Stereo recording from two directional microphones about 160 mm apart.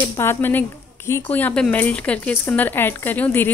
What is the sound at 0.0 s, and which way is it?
A woman's voice, 15° left (ahead or behind).